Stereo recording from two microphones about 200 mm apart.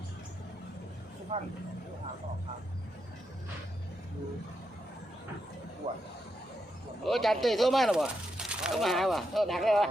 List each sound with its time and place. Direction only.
1.3 s speech: 35° right (ahead or behind)
5.8 s speech: 35° right (ahead or behind)
7.0 s speech: centre (ahead or behind)